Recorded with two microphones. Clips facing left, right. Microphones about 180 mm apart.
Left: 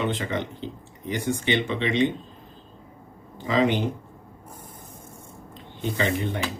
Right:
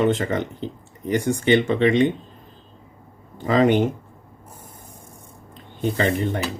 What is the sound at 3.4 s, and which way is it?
Speech, 50° right (ahead or behind).